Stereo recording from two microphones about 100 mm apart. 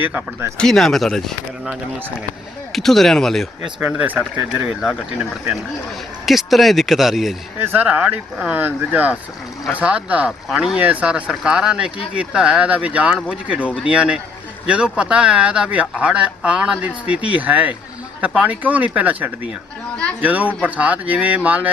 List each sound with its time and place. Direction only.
0.0 s a man's voice: 15° right (ahead or behind)
0.5 s speech: 5° left (ahead or behind)
2.7 s speech: centre (ahead or behind)
3.8 s a man's voice: 15° right (ahead or behind)
6.2 s speech: centre (ahead or behind)
7.6 s a man's voice: 20° right (ahead or behind)